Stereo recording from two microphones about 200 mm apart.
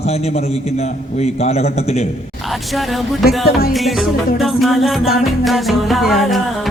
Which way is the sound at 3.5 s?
50° left (ahead or behind).